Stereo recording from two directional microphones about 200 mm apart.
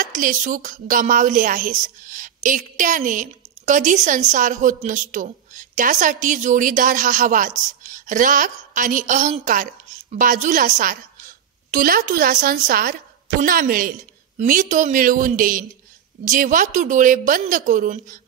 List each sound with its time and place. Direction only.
0.0 s speech: 40° right (ahead or behind)